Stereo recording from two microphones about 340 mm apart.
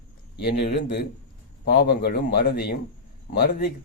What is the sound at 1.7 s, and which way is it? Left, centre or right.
A man's voice, left.